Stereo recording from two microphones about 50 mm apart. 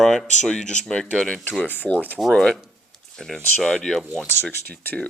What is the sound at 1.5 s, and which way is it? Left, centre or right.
Speech, left.